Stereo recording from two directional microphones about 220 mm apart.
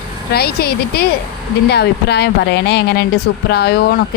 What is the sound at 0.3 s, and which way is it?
A woman's voice, 45° left (ahead or behind).